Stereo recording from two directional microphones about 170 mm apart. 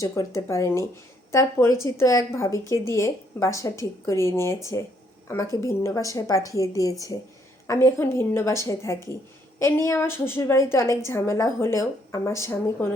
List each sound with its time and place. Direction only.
0.0 s a woman's voice: 20° left (ahead or behind)